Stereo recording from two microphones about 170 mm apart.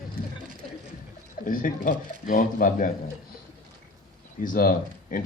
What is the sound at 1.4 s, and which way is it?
Speech, 55° left (ahead or behind).